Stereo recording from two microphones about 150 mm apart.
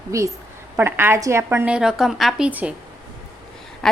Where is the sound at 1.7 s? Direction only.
5° right (ahead or behind).